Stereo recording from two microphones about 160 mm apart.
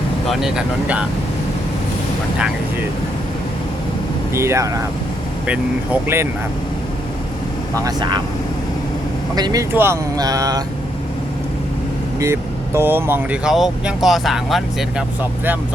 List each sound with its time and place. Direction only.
0.3 s speech: 5° right (ahead or behind)
4.4 s speech: 20° right (ahead or behind)
7.9 s speech: 25° right (ahead or behind)
9.3 s speech: 25° right (ahead or behind)
12.2 s speech: 15° right (ahead or behind)